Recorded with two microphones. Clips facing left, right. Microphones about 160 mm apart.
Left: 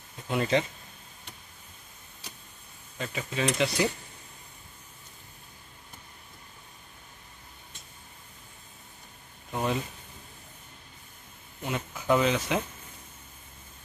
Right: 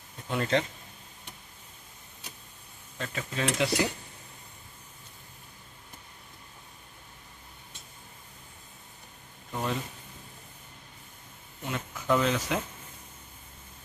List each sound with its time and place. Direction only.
0.3 s speech: 10° left (ahead or behind)
3.0 s speech: 5° left (ahead or behind)
9.5 s speech: 20° left (ahead or behind)
11.6 s speech: 5° left (ahead or behind)